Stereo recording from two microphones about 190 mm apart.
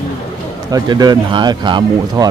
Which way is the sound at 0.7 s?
20° right (ahead or behind).